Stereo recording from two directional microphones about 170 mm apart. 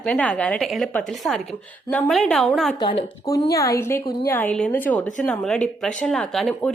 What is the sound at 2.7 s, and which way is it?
A woman's voice, 25° left (ahead or behind).